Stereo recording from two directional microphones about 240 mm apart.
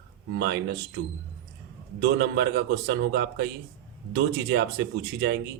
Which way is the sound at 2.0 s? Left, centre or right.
Right.